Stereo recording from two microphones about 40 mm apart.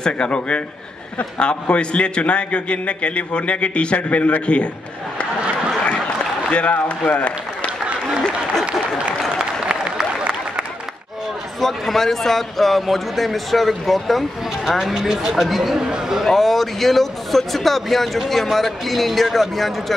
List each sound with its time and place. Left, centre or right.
0.0 s a man's voice: left
6.0 s applause: left
9.7 s applause: right
11.6 s a man's voice: centre
15.8 s speech: centre
16.3 s a man's voice: centre